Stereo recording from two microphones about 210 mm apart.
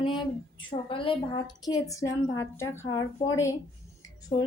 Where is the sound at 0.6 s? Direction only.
25° left (ahead or behind).